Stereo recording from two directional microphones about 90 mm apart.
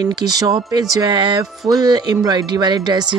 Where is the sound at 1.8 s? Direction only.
50° right (ahead or behind).